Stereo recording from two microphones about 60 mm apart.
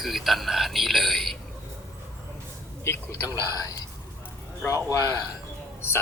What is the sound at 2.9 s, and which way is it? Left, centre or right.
Speech, left.